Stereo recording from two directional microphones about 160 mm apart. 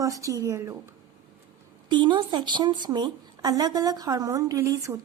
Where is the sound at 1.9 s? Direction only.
30° right (ahead or behind).